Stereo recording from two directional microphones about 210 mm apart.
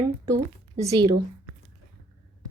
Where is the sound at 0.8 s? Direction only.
15° right (ahead or behind).